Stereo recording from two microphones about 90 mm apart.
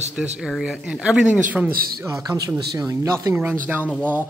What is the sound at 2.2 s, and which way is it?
Speech, 45° right (ahead or behind).